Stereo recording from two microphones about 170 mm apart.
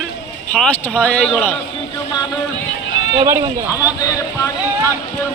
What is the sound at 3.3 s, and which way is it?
Speech, 15° right (ahead or behind).